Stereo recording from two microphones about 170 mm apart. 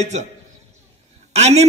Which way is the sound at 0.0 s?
40° right (ahead or behind).